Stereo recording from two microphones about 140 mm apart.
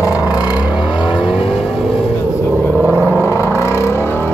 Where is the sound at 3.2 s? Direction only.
20° left (ahead or behind).